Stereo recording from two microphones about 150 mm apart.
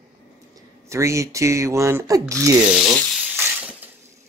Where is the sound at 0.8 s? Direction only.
20° right (ahead or behind).